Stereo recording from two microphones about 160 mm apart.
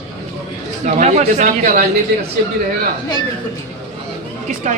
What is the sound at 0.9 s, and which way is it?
Speech, 50° right (ahead or behind).